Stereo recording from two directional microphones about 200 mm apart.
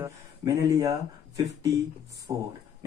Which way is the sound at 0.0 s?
15° right (ahead or behind).